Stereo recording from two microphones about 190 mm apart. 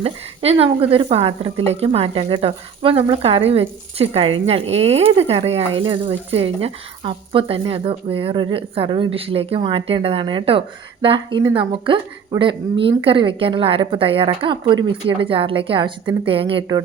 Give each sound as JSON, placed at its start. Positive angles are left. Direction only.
{"t": 0.0, "sound": "speech", "side_deg": -30}